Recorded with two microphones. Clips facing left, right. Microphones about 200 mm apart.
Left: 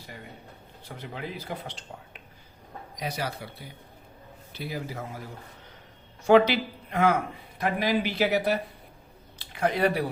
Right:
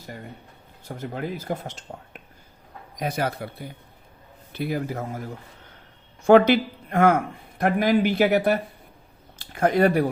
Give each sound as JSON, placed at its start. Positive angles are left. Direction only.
{"t": 0.9, "sound": "speech", "side_deg": -45}
{"t": 6.2, "sound": "speech", "side_deg": -50}